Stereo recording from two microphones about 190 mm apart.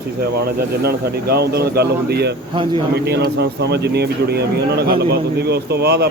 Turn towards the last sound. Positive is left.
turn(degrees=-55)  # may be behind; listen again after turning